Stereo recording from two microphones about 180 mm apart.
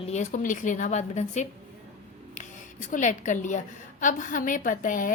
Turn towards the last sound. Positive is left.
turn(degrees=45)  # may be behind; listen again after turning